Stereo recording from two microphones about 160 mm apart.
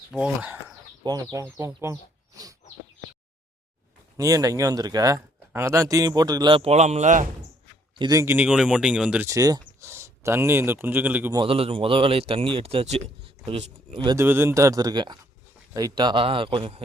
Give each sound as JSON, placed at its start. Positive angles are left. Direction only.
{"t": 0.1, "sound": "speech", "side_deg": -10}
{"t": 1.0, "sound": "speech", "side_deg": -25}
{"t": 4.2, "sound": "speech", "side_deg": -20}
{"t": 7.9, "sound": "speech", "side_deg": -25}
{"t": 9.2, "sound": "speech", "side_deg": -20}
{"t": 11.3, "sound": "speech", "side_deg": -35}
{"t": 14.2, "sound": "speech", "side_deg": -15}